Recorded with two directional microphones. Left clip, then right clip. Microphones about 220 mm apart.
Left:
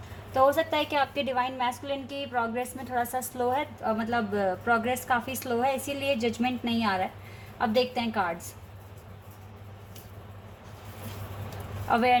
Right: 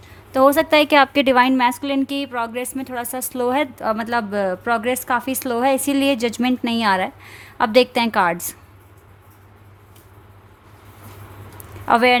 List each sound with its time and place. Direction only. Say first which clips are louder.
0.3 s a woman's voice: right 9 dB; 45° right (ahead or behind)
2.7 s a woman's voice: right 3 dB; 90° right
3.5 s a woman's voice: right 10 dB; 50° right (ahead or behind)
11.9 s a woman's voice: right 9 dB; 50° right (ahead or behind)